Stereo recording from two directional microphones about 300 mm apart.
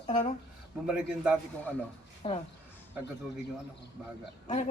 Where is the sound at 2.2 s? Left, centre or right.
Centre.